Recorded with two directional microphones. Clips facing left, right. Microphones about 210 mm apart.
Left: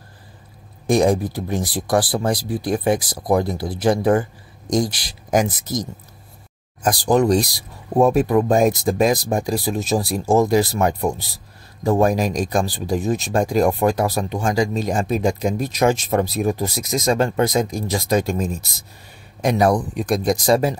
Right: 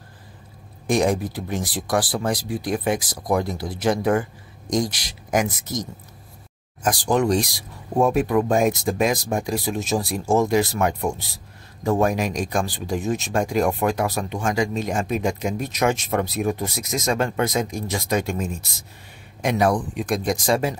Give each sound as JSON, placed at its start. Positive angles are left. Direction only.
{"t": 0.8, "sound": "speech", "side_deg": 35}